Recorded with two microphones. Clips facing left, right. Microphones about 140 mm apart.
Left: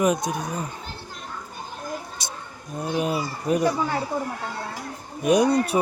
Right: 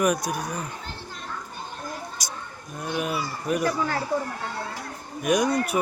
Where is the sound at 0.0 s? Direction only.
25° left (ahead or behind).